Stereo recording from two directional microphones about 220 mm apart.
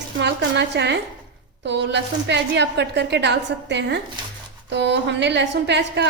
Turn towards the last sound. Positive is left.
turn(degrees=-50)  # may be behind; listen again after turning